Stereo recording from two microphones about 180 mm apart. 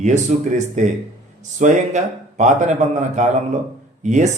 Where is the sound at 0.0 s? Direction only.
40° right (ahead or behind).